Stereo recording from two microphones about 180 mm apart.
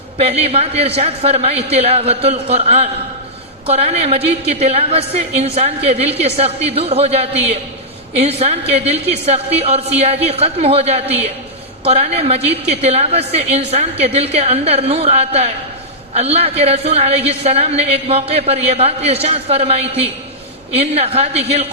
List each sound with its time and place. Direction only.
0.2 s a woman's voice: 35° right (ahead or behind)